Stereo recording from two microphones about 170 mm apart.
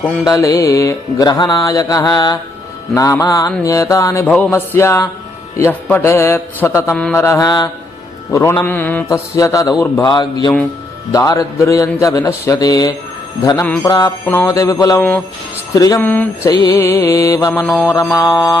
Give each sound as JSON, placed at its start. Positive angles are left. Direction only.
{"t": 0.3, "sound": "music", "side_deg": 20}
{"t": 4.3, "sound": "mantra", "side_deg": 10}
{"t": 6.9, "sound": "mantra", "side_deg": 5}
{"t": 7.2, "sound": "music", "side_deg": 15}
{"t": 8.3, "sound": "mantra", "side_deg": 20}
{"t": 10.0, "sound": "music", "side_deg": 25}
{"t": 14.3, "sound": "mantra", "side_deg": 15}
{"t": 16.5, "sound": "music", "side_deg": 20}
{"t": 17.5, "sound": "mantra", "side_deg": 10}